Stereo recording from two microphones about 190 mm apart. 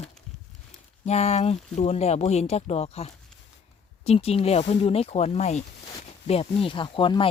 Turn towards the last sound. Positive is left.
turn(degrees=25)  # may be behind; listen again after turning